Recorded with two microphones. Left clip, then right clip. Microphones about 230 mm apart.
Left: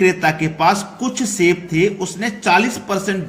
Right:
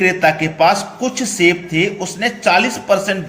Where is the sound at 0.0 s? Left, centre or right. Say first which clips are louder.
Right 2 dB; centre.